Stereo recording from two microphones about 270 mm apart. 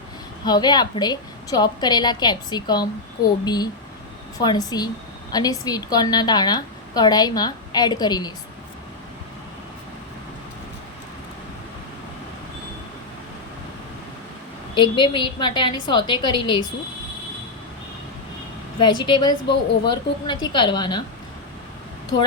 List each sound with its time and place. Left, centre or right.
0.4 s a woman's voice: centre
14.8 s a woman's voice: centre
18.8 s a woman's voice: centre